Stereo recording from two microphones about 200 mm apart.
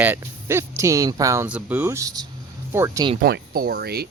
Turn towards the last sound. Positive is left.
turn(degrees=-50)  # may be behind; listen again after turning